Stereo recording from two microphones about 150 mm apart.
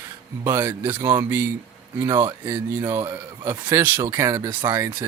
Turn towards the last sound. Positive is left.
turn(degrees=-15)  # may be behind; listen again after turning